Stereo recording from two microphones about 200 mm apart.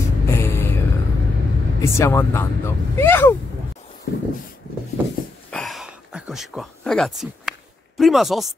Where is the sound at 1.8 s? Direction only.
10° left (ahead or behind).